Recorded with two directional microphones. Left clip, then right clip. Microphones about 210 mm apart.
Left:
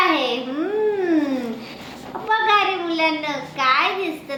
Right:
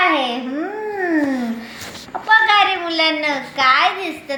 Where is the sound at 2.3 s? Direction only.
45° right (ahead or behind).